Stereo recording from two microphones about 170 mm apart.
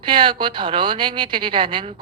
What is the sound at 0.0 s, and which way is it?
A woman's voice, 30° right (ahead or behind).